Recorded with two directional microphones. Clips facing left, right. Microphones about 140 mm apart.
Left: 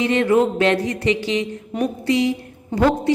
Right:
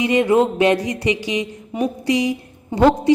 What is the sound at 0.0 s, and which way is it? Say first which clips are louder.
A woman's voice: right 1 dB; 15° right (ahead or behind).